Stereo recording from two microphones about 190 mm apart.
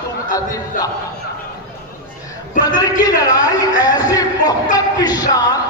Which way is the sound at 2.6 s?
20° left (ahead or behind).